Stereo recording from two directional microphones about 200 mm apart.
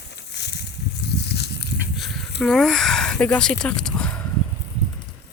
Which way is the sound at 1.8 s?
Centre (ahead or behind).